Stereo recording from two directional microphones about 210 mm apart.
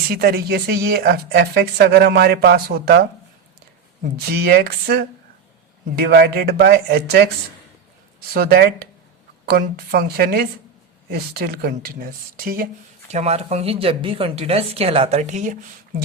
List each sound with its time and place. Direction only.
0.1 s speech: 50° right (ahead or behind)
4.4 s speech: 50° right (ahead or behind)
8.3 s speech: 45° right (ahead or behind)
13.1 s speech: 30° right (ahead or behind)